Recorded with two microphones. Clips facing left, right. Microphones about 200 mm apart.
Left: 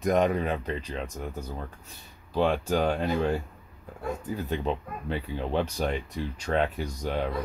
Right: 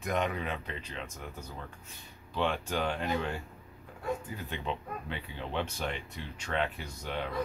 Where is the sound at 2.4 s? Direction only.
40° left (ahead or behind).